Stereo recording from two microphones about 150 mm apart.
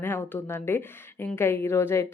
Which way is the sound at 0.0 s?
15° left (ahead or behind).